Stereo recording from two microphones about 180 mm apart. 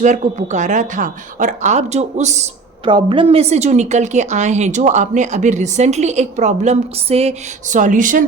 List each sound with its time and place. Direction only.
0.0 s a woman's voice: 40° right (ahead or behind)